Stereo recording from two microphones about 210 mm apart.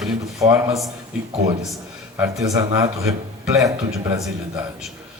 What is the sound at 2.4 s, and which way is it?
Speech, 15° right (ahead or behind).